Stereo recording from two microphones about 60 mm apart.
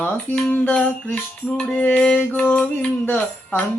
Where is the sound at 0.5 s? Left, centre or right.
Left.